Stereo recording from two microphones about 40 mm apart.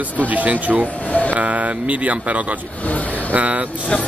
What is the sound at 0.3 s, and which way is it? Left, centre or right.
Speech, right.